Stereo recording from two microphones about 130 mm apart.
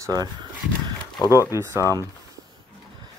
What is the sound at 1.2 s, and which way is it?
Speech, 25° left (ahead or behind).